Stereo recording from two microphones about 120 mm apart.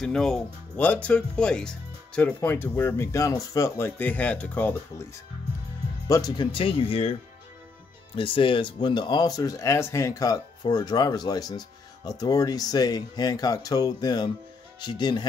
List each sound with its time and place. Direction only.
0.0 s speech: 5° left (ahead or behind)
2.5 s speech: 20° left (ahead or behind)
6.0 s speech: 25° left (ahead or behind)
6.3 s speech: 45° left (ahead or behind)
8.2 s speech: 45° left (ahead or behind)